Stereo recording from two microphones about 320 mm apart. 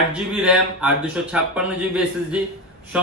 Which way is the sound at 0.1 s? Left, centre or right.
Centre.